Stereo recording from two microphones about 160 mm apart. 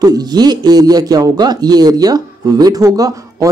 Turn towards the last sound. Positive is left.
turn(degrees=-20)  # may be behind; listen again after turning